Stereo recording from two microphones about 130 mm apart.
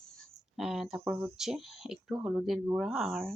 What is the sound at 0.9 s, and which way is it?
Speech, 15° right (ahead or behind).